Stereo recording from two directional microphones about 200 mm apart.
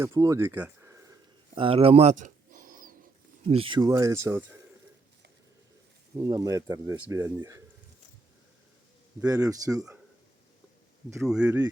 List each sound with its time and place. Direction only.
0.0 s speech: 15° right (ahead or behind)
1.5 s a sound: 30° right (ahead or behind)
3.4 s speech: 25° right (ahead or behind)
6.1 s speech: 20° right (ahead or behind)
9.2 s speech: 15° right (ahead or behind)
11.2 s speech: 5° right (ahead or behind)